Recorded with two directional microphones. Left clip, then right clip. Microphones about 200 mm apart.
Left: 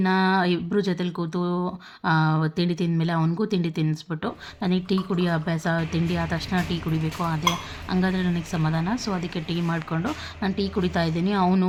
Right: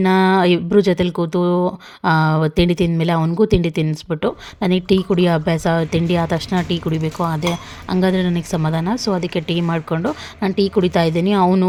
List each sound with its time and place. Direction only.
0.0 s speech: 35° right (ahead or behind)